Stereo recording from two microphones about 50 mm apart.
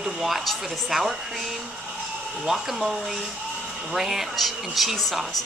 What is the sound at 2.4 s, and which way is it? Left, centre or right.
A woman's voice, centre.